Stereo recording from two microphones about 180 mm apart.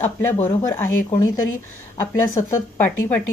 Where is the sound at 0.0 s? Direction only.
10° left (ahead or behind).